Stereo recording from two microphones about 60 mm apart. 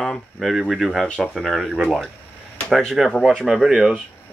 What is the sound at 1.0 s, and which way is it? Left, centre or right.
Speech, centre.